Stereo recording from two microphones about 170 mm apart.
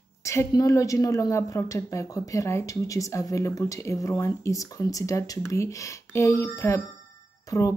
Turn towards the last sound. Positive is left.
turn(degrees=20)  # may be behind; listen again after turning